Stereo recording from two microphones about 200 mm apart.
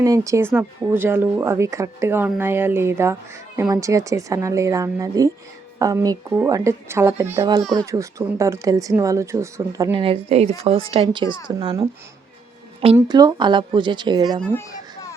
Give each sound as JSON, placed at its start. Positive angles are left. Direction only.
{"t": 0.0, "sound": "speech", "side_deg": -15}
{"t": 13.0, "sound": "speech", "side_deg": -20}
{"t": 14.4, "sound": "children playing", "side_deg": 10}